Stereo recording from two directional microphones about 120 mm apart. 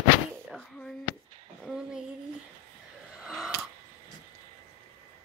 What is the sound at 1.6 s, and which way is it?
Speech, 5° right (ahead or behind).